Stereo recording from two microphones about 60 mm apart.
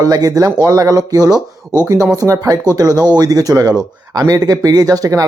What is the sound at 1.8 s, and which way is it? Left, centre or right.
Speech, right.